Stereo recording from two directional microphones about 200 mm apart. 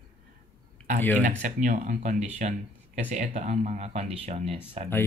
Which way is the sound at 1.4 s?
40° right (ahead or behind).